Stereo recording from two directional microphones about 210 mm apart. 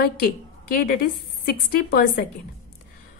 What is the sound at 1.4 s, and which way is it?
Speech, 45° left (ahead or behind).